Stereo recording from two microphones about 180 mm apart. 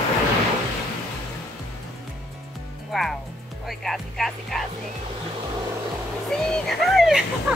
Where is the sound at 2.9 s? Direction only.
Centre (ahead or behind).